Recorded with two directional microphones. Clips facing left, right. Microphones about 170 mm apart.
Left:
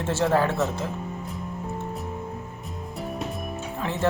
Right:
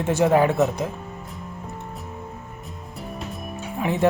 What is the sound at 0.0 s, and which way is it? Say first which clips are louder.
Speech: right 4 dB; 15° right (ahead or behind).